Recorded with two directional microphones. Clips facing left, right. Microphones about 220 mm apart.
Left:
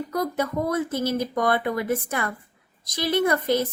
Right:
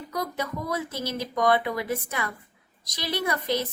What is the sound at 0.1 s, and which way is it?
A woman's voice, 55° left (ahead or behind).